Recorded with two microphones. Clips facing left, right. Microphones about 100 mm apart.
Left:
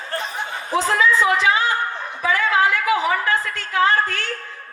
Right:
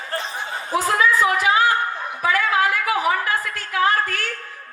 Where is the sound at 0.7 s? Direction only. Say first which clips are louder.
Left 1 dB; 25° left (ahead or behind).